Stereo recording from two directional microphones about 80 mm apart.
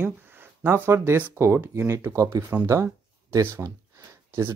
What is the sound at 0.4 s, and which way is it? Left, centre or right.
Speech, right.